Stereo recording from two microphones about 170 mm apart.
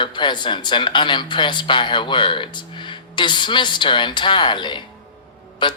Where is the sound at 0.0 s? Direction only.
25° left (ahead or behind).